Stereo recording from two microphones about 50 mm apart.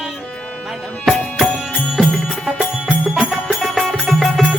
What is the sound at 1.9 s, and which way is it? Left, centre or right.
Music, centre.